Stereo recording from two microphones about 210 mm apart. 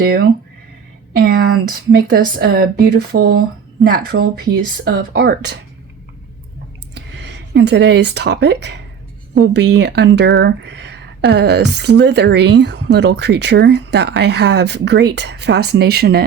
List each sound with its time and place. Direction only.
0.0 s speech: 45° right (ahead or behind)
6.9 s speech: 55° right (ahead or behind)